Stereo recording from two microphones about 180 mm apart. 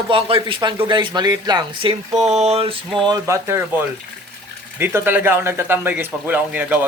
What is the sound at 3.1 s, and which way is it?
Speech, 15° right (ahead or behind).